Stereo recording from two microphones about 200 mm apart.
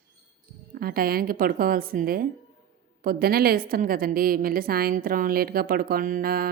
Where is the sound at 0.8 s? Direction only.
50° right (ahead or behind).